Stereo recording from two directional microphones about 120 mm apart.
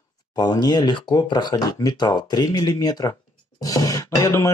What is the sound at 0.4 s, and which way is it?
Speech, 35° left (ahead or behind).